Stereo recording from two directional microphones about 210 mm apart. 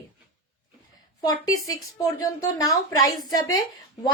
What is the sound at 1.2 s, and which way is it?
A woman's voice, 15° left (ahead or behind).